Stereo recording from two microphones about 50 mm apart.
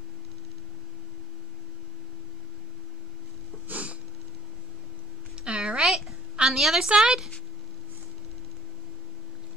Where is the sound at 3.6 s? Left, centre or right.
Right.